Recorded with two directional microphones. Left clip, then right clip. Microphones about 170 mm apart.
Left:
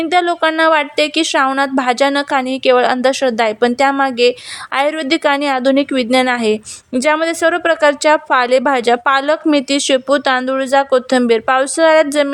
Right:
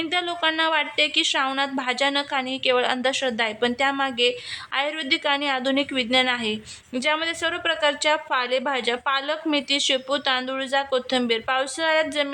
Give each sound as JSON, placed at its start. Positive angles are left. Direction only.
{"t": 0.0, "sound": "speech", "side_deg": 45}